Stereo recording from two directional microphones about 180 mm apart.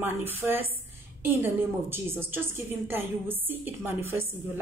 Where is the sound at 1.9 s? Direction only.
10° right (ahead or behind).